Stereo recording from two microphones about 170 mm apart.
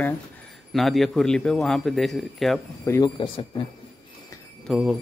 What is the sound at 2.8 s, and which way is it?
Speech, 15° left (ahead or behind).